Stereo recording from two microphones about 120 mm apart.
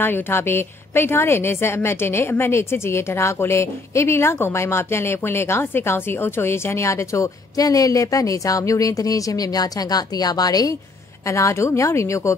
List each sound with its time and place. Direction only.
0.0 s a woman's voice: 20° left (ahead or behind)